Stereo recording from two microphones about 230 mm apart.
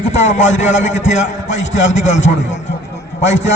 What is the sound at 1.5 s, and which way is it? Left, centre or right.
Speech, left.